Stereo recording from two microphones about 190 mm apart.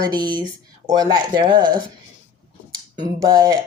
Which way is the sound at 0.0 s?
20° right (ahead or behind).